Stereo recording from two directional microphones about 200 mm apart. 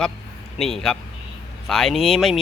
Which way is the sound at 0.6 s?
Centre (ahead or behind).